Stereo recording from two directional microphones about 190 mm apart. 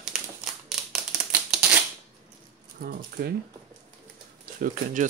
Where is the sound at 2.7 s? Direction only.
50° right (ahead or behind).